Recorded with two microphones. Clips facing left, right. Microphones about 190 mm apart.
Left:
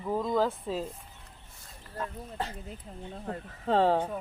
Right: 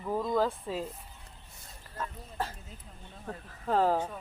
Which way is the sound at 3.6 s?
30° left (ahead or behind).